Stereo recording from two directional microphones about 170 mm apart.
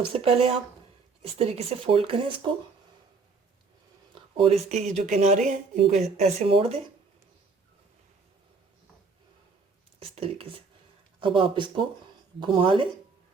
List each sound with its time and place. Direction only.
0.0 s speech: 35° right (ahead or behind)
4.1 s speech: 35° right (ahead or behind)
10.0 s speech: 35° right (ahead or behind)